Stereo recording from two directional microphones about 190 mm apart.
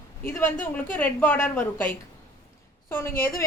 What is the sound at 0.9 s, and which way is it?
A woman's voice, 10° left (ahead or behind).